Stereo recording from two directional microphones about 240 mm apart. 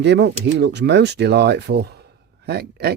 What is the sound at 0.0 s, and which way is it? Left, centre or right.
Speech, right.